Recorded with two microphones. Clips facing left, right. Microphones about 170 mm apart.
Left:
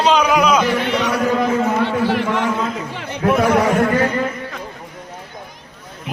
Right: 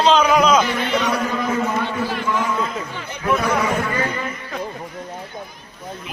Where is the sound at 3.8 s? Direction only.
50° left (ahead or behind).